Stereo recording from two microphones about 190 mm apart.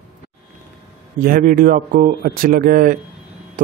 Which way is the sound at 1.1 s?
50° right (ahead or behind).